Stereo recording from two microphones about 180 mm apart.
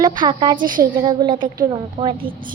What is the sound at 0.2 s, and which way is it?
A woman's voice, 25° right (ahead or behind).